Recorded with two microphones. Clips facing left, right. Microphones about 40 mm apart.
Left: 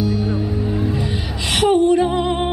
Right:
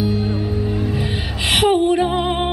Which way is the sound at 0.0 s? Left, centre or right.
Right.